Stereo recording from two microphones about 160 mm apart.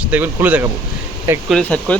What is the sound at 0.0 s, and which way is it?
Speech, 10° right (ahead or behind).